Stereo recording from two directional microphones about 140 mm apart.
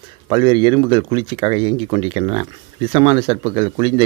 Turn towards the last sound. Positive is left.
turn(degrees=-35)  # may be behind; listen again after turning